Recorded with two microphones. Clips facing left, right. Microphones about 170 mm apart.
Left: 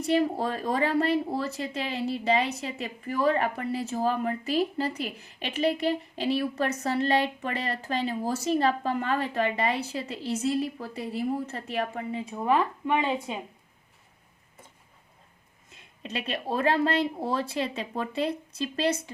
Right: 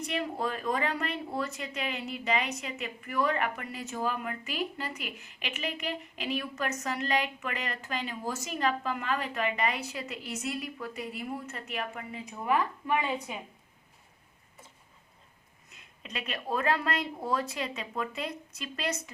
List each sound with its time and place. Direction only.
0.0 s speech: 35° left (ahead or behind)
15.7 s speech: 30° left (ahead or behind)